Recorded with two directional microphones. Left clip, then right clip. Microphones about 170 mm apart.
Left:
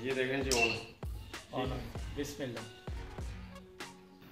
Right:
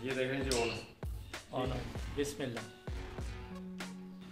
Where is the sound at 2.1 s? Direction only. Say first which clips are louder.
Right 3 dB; 50° right (ahead or behind).